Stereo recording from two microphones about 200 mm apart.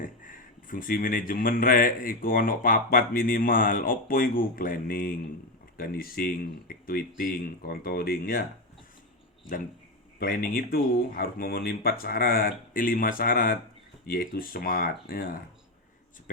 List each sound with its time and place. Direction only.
0.0 s a man's voice: 40° left (ahead or behind)
10.2 s a man's voice: 45° left (ahead or behind)